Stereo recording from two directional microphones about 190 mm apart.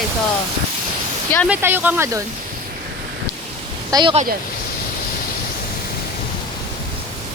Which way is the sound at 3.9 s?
25° right (ahead or behind).